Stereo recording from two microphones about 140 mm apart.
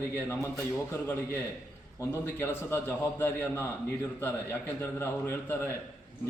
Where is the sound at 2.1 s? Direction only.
15° left (ahead or behind).